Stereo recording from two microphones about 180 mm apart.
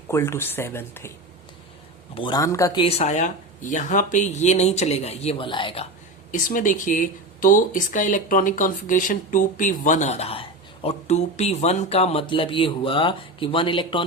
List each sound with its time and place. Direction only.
0.1 s speech: 15° left (ahead or behind)
2.1 s speech: 25° left (ahead or behind)
2.8 s speech: 35° left (ahead or behind)
6.3 s speech: 45° left (ahead or behind); by 14.0 s 30° left (ahead or behind)